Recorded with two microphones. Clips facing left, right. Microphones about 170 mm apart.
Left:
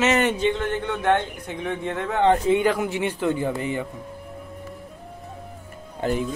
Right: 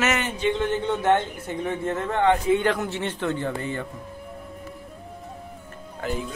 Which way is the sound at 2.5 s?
10° left (ahead or behind).